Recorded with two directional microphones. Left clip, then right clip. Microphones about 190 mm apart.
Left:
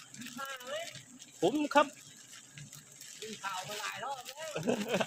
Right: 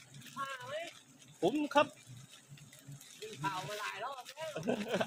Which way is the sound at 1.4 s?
40° left (ahead or behind).